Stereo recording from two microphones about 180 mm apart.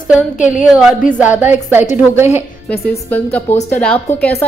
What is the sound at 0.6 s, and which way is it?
A woman's voice, 5° right (ahead or behind).